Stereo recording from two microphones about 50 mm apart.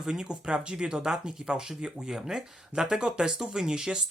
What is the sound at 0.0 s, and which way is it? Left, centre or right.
Speech, centre.